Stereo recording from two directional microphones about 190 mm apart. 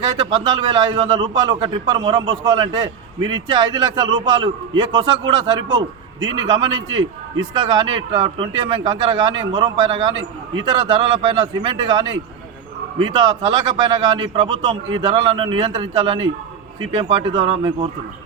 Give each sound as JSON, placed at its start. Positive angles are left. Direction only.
{"t": 0.4, "sound": "a man's voice", "side_deg": -25}
{"t": 6.8, "sound": "a man's voice", "side_deg": -90}
{"t": 7.5, "sound": "a man's voice", "side_deg": -25}